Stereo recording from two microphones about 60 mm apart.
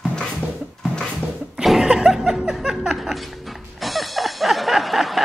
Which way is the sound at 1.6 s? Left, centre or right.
Centre.